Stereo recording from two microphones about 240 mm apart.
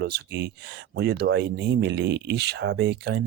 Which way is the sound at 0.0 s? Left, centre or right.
Right.